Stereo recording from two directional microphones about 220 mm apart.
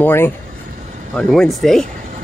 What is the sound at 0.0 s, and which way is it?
Speech, 10° left (ahead or behind).